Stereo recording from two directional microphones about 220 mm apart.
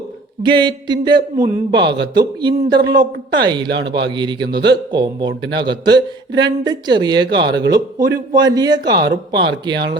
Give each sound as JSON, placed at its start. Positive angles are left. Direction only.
{"t": 0.4, "sound": "a man's voice", "side_deg": -20}
{"t": 3.7, "sound": "a man's voice", "side_deg": -50}
{"t": 4.0, "sound": "a man's voice", "side_deg": -20}